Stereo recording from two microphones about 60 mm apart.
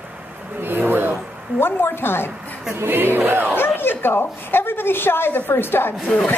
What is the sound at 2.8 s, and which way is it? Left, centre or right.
Speech, right.